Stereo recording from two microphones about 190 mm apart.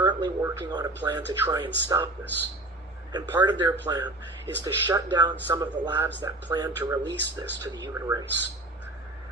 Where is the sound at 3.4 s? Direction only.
15° right (ahead or behind).